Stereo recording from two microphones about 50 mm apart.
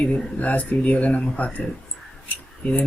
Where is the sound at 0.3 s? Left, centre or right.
Left.